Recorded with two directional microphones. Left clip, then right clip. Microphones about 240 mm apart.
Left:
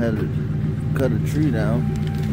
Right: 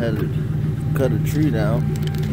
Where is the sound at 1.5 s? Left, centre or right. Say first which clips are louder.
Right 1 dB; centre.